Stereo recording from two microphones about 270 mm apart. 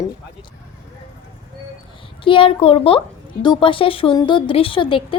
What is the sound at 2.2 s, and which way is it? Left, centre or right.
A woman's voice, centre.